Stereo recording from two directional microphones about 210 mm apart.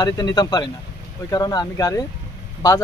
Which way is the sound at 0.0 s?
20° left (ahead or behind).